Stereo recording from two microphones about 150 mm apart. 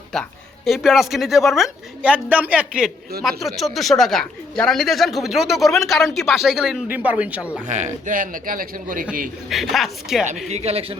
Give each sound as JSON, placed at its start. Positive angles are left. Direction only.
{"t": 0.1, "sound": "speech", "side_deg": 0}
{"t": 7.7, "sound": "a man's voice", "side_deg": -50}
{"t": 9.5, "sound": "speech", "side_deg": 0}
{"t": 10.5, "sound": "speech", "side_deg": -45}